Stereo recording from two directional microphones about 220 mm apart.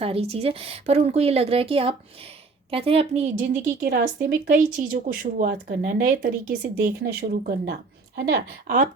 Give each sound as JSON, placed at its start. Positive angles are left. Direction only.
{"t": 0.0, "sound": "a woman's voice", "side_deg": -25}